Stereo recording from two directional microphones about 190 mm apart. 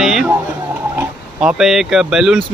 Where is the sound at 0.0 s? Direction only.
5° right (ahead or behind).